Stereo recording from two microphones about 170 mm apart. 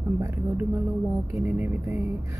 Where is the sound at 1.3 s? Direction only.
10° right (ahead or behind).